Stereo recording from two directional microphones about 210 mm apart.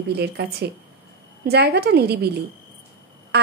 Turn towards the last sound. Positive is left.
turn(degrees=-50)  # may be behind; listen again after turning